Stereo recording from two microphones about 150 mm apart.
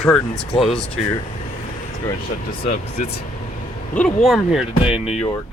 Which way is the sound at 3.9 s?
5° left (ahead or behind).